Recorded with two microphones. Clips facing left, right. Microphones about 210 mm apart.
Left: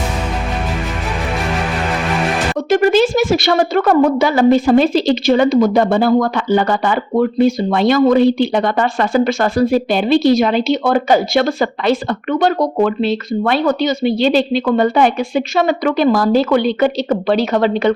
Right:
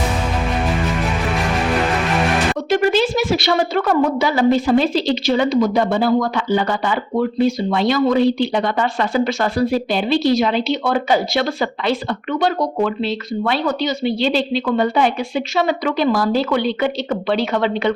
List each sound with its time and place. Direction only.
2.6 s a woman's voice: 45° left (ahead or behind)